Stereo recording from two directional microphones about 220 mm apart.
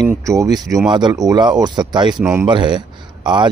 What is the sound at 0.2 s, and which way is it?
Speech, 15° right (ahead or behind).